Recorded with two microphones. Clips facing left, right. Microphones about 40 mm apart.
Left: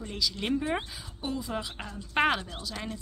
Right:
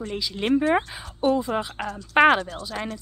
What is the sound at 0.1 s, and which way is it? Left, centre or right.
Speech, right.